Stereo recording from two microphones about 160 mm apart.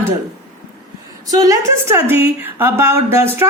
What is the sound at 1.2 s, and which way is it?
A woman's voice, 20° right (ahead or behind).